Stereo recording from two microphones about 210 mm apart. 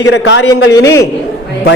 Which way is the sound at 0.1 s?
60° left (ahead or behind).